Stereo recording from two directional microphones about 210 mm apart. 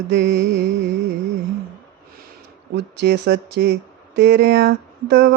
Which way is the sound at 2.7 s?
55° right (ahead or behind).